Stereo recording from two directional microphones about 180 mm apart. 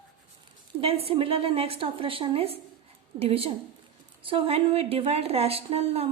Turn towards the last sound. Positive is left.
turn(degrees=-35)  # may be behind; listen again after turning